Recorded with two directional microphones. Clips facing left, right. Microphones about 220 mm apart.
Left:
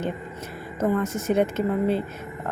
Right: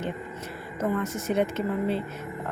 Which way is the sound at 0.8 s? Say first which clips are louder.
Left 4 dB; 45° left (ahead or behind).